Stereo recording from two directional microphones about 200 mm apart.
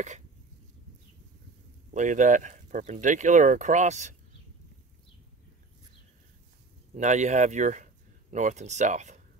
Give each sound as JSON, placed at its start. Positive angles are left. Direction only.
{"t": 2.0, "sound": "speech", "side_deg": -40}
{"t": 7.0, "sound": "speech", "side_deg": -35}